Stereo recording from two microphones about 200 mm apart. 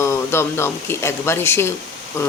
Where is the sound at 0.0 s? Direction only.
15° left (ahead or behind).